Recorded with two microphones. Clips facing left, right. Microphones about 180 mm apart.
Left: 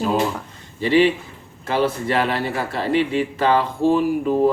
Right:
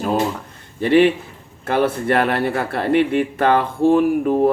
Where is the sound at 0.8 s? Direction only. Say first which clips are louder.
Right 2 dB; 55° right (ahead or behind).